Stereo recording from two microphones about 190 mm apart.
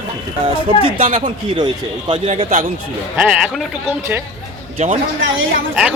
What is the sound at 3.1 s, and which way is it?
Speech, 5° right (ahead or behind).